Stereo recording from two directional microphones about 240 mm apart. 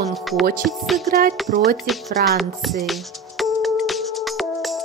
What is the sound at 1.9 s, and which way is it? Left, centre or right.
Music, centre.